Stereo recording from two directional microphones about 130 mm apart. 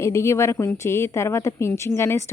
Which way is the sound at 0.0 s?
20° left (ahead or behind).